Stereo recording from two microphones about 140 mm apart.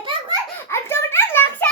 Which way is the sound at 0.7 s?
15° left (ahead or behind).